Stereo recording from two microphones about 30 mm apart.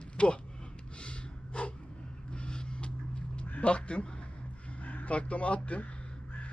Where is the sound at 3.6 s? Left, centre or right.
Left.